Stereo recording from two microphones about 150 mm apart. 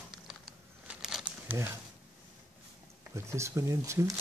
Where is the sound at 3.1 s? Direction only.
20° right (ahead or behind).